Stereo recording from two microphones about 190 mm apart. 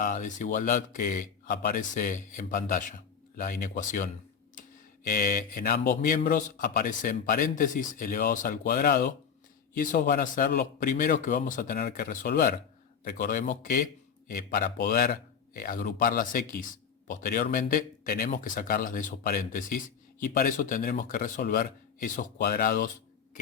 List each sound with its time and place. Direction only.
0.0 s speech: 40° left (ahead or behind)